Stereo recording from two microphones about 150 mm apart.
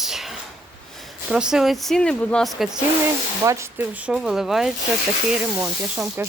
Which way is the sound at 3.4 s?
20° right (ahead or behind).